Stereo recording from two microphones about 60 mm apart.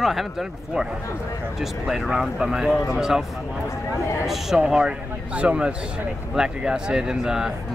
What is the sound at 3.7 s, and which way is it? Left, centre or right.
Speech, left.